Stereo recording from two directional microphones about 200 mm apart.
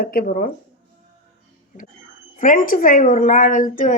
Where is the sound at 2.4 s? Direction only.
40° left (ahead or behind).